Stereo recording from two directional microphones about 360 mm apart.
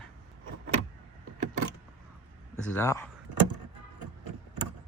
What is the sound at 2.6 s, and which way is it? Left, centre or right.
Speech, centre.